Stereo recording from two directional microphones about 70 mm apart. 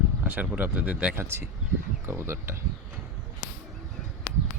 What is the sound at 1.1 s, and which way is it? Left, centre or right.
Speech, right.